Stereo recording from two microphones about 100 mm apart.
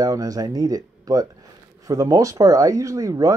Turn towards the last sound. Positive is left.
turn(degrees=-35)  # may be behind; listen again after turning